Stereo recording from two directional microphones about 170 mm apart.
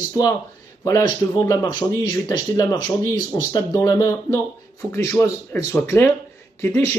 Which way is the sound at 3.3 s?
20° left (ahead or behind).